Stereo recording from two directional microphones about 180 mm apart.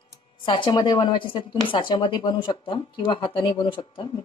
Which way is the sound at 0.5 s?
25° left (ahead or behind).